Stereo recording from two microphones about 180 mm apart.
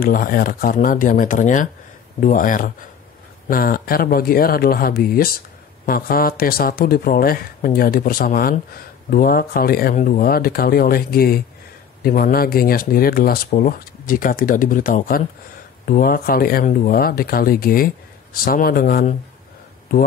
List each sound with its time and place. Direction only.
0.0 s speech: 50° left (ahead or behind)